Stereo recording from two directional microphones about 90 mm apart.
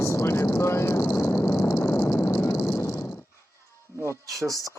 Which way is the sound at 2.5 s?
30° left (ahead or behind).